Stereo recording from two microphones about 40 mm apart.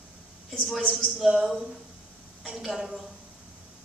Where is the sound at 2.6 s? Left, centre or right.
Centre.